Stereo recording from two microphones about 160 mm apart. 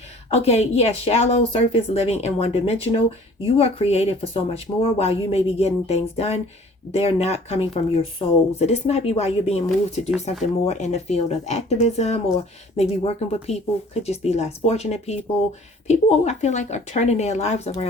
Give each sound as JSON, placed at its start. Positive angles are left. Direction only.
{"t": 0.3, "sound": "speech", "side_deg": 40}